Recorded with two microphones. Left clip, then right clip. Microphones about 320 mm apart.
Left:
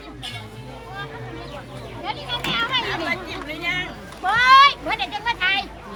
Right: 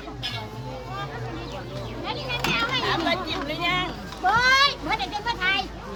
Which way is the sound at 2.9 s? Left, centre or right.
Right.